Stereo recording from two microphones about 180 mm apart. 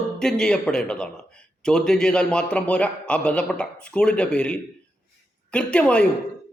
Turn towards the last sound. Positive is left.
turn(degrees=5)  # may be behind; listen again after turning